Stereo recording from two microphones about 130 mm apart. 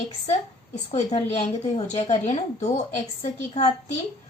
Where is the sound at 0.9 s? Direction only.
55° left (ahead or behind).